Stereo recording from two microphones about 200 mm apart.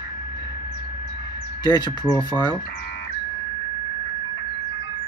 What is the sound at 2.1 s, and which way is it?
Speech, 10° left (ahead or behind).